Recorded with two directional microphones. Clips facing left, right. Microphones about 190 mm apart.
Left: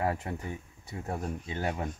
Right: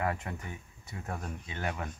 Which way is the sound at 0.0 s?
30° left (ahead or behind).